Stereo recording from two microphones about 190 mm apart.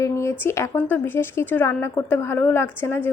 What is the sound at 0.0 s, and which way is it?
Speech, 15° left (ahead or behind).